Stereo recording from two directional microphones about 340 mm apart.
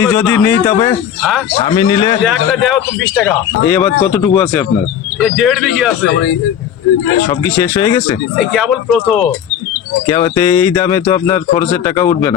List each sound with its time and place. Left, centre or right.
0.0 s speech: centre
2.2 s speech: centre
7.3 s speech: centre